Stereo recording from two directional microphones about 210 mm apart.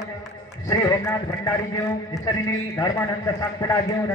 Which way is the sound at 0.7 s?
15° left (ahead or behind).